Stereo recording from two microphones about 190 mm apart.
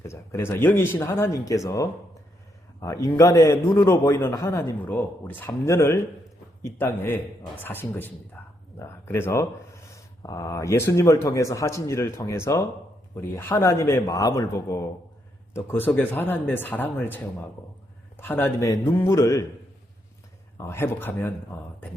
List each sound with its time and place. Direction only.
0.0 s speech: 15° left (ahead or behind)
18.2 s speech: 10° left (ahead or behind)
20.6 s speech: 15° left (ahead or behind)